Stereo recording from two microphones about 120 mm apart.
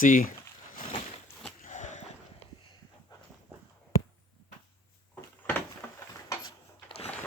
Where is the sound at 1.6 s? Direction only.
90° left.